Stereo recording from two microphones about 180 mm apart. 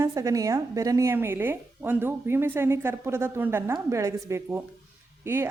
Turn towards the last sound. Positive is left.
turn(degrees=-15)  # may be behind; listen again after turning